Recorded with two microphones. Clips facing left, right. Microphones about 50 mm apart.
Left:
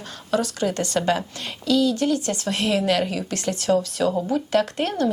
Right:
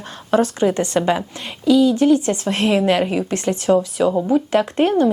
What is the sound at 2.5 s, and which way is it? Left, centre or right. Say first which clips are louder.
Speech: right 4 dB; right.